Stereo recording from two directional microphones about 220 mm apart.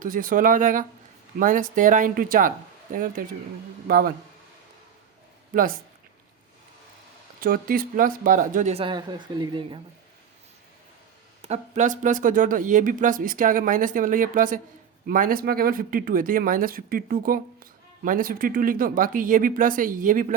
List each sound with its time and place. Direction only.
0.0 s speech: 40° right (ahead or behind)
5.5 s speech: 40° right (ahead or behind)
7.4 s speech: 40° right (ahead or behind); by 9.8 s 20° right (ahead or behind)
11.4 s speech: 30° right (ahead or behind)